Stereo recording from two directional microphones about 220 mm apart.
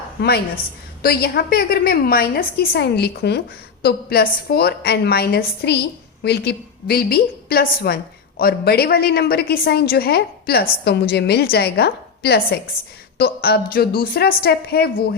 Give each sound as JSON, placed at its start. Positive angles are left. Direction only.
{"t": 0.2, "sound": "a woman's voice", "side_deg": 45}